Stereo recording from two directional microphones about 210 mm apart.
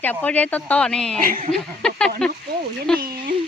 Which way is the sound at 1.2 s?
40° right (ahead or behind).